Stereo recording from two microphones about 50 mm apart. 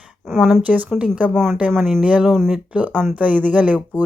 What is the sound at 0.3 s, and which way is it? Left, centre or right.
Speech, centre.